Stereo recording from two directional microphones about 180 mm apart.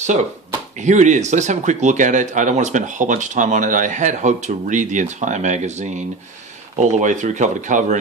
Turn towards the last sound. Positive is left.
turn(degrees=-40)  # may be behind; listen again after turning